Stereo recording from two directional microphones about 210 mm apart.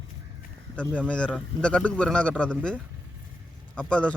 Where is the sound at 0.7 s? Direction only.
5° left (ahead or behind).